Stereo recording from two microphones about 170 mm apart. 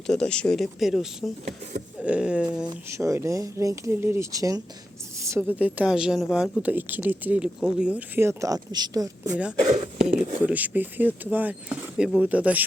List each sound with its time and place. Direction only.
0.1 s speech: 5° left (ahead or behind)
2.6 s speech: 20° right (ahead or behind)
5.5 s speech: 10° right (ahead or behind)
9.6 s speech: 40° right (ahead or behind)
10.4 s speech: 10° right (ahead or behind)